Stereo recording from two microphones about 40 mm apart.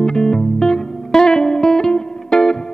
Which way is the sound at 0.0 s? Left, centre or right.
Centre.